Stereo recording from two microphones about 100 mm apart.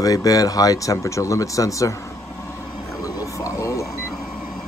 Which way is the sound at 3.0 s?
35° left (ahead or behind).